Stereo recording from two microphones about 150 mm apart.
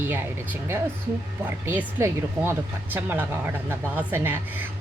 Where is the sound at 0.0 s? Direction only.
15° right (ahead or behind).